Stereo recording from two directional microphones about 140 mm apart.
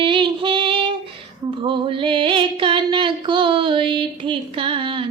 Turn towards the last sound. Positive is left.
turn(degrees=-35)  # may be behind; listen again after turning